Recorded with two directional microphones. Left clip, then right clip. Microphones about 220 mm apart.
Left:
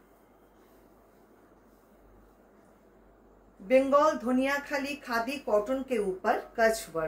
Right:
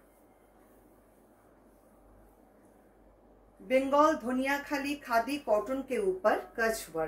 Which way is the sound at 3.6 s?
15° left (ahead or behind).